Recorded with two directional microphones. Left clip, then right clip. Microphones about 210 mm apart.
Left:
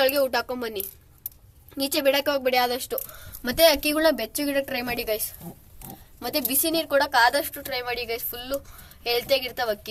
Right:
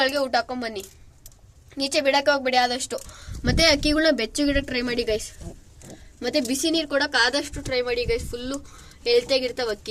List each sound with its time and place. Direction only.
0.0 s a woman's voice: centre (ahead or behind)